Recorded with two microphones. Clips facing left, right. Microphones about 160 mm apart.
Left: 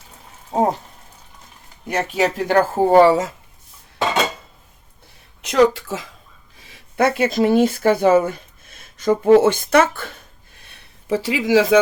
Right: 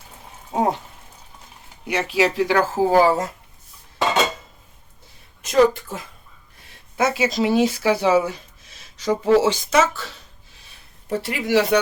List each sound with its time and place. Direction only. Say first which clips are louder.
0.5 s speech: left 2 dB; 40° left (ahead or behind)
1.9 s speech: even; 45° left (ahead or behind); by 3.3 s 90° left
5.4 s speech: left 1 dB; 70° left (ahead or behind); by 11.8 s 90° left